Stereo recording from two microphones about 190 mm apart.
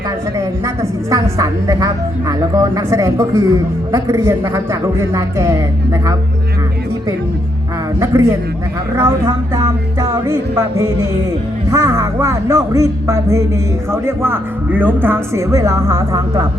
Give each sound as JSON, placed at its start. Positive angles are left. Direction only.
{"t": 0.3, "sound": "speech", "side_deg": -15}
{"t": 7.9, "sound": "speech", "side_deg": -15}